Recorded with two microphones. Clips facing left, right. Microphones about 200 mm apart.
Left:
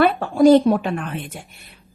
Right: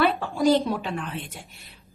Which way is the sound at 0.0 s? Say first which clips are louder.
Left 7 dB; 50° left (ahead or behind).